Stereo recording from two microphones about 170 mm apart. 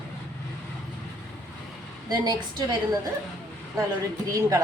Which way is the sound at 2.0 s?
25° right (ahead or behind).